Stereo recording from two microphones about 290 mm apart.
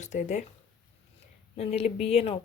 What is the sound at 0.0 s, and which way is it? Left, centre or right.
Speech, left.